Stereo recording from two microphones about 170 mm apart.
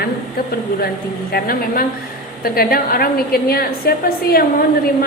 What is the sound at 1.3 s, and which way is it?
A woman's voice, 60° left (ahead or behind).